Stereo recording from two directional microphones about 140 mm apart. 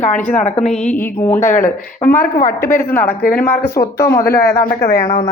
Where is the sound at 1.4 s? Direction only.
70° left (ahead or behind).